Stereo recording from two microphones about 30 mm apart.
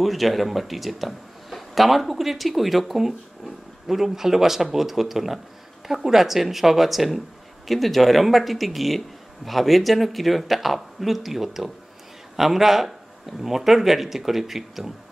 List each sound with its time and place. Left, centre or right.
0.0 s speech: centre